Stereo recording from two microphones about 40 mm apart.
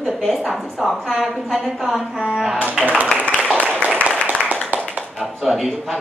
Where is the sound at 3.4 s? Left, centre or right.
Right.